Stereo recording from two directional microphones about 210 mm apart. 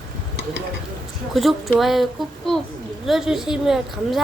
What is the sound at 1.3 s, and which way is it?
A woman's voice, centre (ahead or behind).